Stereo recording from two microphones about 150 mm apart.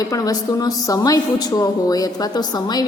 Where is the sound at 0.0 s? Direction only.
25° left (ahead or behind).